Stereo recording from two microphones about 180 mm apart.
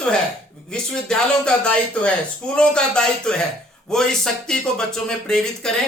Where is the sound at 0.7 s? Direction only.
5° left (ahead or behind).